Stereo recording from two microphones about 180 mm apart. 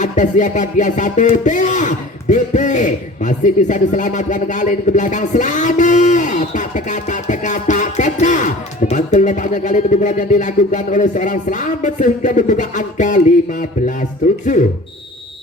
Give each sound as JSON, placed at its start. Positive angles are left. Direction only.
{"t": 0.0, "sound": "music", "side_deg": 45}